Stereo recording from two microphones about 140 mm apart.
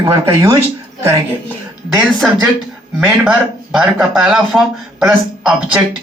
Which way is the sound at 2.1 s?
Centre (ahead or behind).